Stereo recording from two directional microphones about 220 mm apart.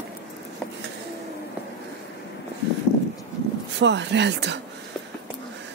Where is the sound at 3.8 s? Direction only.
55° right (ahead or behind).